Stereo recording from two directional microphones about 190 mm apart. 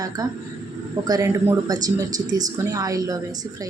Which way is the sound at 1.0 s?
20° right (ahead or behind).